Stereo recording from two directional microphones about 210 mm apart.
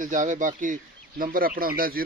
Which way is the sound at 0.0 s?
40° right (ahead or behind).